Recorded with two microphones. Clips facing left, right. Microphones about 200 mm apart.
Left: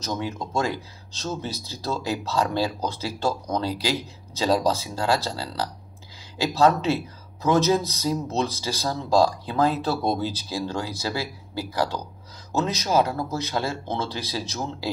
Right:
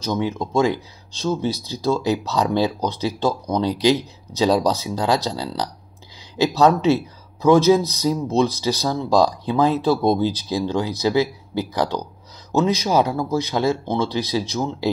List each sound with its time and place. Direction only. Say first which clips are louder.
0.2 s speech: right 8 dB; 15° right (ahead or behind)